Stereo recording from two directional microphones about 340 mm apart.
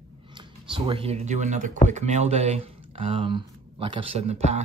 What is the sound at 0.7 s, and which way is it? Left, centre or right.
Speech, centre.